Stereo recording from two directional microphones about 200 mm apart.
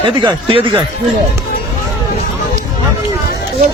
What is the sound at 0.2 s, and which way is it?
Speech, 25° right (ahead or behind).